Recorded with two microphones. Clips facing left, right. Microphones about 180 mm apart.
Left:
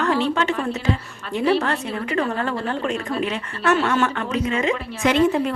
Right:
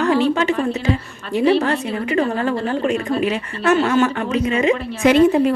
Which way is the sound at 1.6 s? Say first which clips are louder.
Right 4 dB; 10° right (ahead or behind).